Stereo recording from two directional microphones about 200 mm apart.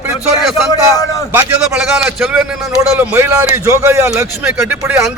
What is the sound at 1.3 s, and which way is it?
A man's voice, 10° right (ahead or behind).